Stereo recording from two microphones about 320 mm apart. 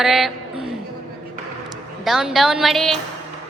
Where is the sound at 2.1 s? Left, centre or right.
Centre.